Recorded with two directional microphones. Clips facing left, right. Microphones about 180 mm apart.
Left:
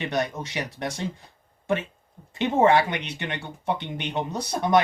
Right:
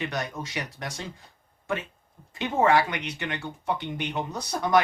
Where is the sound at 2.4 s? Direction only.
25° left (ahead or behind).